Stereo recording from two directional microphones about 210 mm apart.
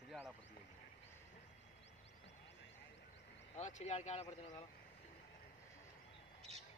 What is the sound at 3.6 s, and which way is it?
Speech, 35° left (ahead or behind).